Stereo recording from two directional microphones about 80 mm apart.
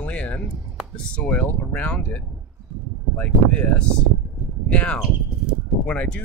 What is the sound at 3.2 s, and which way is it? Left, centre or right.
Speech, centre.